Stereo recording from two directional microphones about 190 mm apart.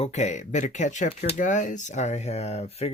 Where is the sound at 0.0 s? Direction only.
40° left (ahead or behind).